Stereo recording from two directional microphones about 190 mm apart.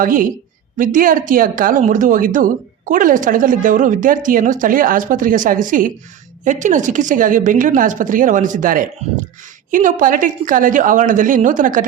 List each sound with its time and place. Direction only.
0.0 s a woman's voice: 45° right (ahead or behind)